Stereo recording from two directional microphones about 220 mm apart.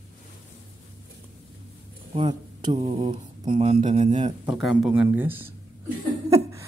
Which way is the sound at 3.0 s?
20° right (ahead or behind).